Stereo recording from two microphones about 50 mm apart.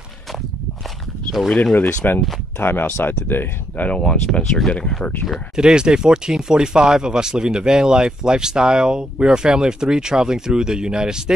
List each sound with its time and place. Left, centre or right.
1.5 s speech: left
2.0 s speech: left
2.6 s speech: left
3.9 s speech: left
5.6 s speech: centre